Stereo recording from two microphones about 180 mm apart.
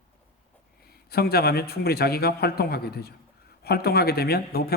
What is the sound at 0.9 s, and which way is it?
A man's voice, 60° left (ahead or behind).